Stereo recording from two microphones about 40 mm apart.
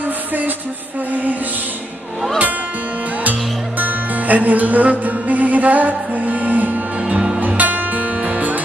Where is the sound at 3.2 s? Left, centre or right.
Right.